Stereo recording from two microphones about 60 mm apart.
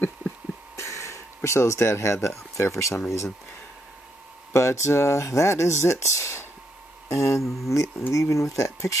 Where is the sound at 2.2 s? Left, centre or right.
Left.